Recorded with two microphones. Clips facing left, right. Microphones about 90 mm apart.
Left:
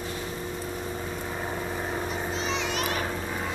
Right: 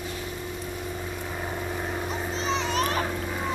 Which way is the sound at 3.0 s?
Centre (ahead or behind).